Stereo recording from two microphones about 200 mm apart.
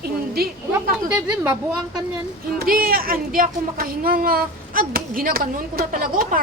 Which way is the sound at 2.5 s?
50° right (ahead or behind).